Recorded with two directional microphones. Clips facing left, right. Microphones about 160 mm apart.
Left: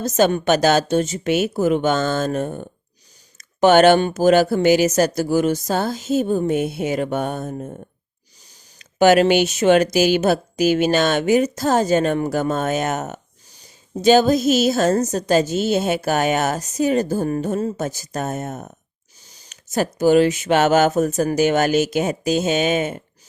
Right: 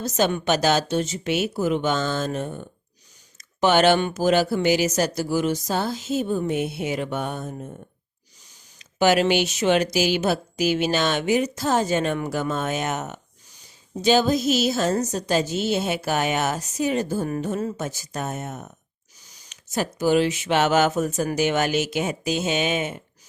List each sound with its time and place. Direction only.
0.0 s speech: 45° left (ahead or behind)
8.8 s speech: 50° left (ahead or behind)
19.2 s a sound: 30° left (ahead or behind)
19.5 s speech: 45° left (ahead or behind)